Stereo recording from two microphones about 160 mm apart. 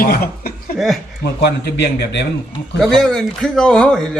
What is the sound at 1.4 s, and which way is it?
Speech, 90° left.